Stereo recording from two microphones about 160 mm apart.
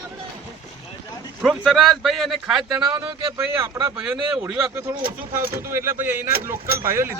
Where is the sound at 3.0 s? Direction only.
15° right (ahead or behind).